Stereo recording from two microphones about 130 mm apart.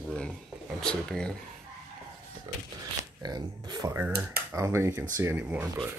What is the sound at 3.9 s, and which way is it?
Speech, 20° right (ahead or behind).